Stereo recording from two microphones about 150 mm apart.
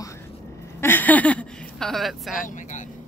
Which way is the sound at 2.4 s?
60° left (ahead or behind).